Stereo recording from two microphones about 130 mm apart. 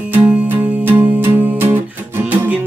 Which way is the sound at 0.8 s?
15° right (ahead or behind).